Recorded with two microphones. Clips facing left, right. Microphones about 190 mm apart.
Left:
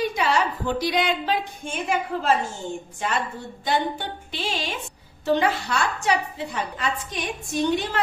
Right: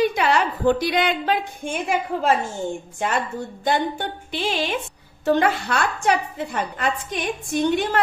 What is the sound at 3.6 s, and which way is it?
A woman's voice, 50° right (ahead or behind).